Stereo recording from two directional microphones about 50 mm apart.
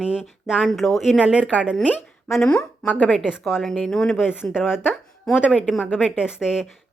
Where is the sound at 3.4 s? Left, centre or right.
Centre.